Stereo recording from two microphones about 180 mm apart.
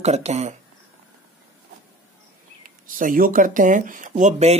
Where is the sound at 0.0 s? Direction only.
40° right (ahead or behind).